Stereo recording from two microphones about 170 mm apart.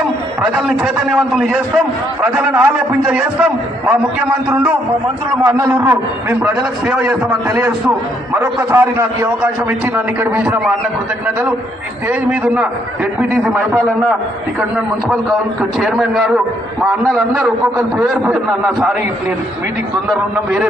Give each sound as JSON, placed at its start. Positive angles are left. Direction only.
{"t": 0.5, "sound": "a man's voice", "side_deg": 0}
{"t": 5.4, "sound": "a man's voice", "side_deg": -20}
{"t": 12.0, "sound": "a man's voice", "side_deg": -10}
{"t": 15.8, "sound": "a man's voice", "side_deg": 0}
{"t": 17.7, "sound": "a man's voice", "side_deg": -10}
{"t": 20.1, "sound": "a man's voice", "side_deg": -5}